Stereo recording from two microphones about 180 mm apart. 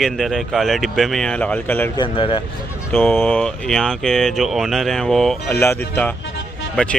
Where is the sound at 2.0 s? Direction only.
25° left (ahead or behind).